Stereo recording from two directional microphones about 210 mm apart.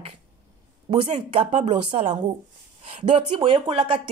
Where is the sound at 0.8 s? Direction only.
30° right (ahead or behind).